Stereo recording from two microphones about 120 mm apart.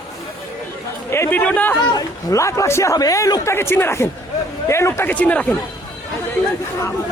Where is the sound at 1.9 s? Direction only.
25° left (ahead or behind).